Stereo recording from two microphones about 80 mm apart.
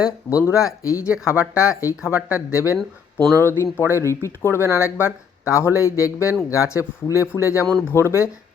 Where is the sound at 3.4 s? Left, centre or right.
Left.